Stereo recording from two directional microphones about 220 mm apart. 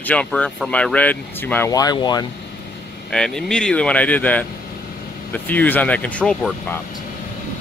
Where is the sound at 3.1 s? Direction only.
Centre (ahead or behind).